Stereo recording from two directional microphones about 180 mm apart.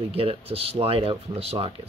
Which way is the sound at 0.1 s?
30° right (ahead or behind).